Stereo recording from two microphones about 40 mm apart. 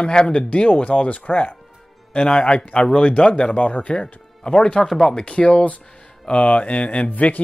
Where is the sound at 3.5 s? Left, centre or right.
Left.